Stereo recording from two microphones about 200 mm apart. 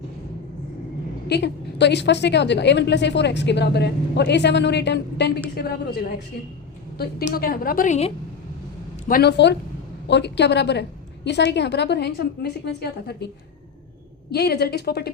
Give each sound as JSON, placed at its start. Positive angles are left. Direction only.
{"t": 1.3, "sound": "a woman's voice", "side_deg": 60}
{"t": 7.3, "sound": "a woman's voice", "side_deg": 50}
{"t": 9.0, "sound": "a woman's voice", "side_deg": 50}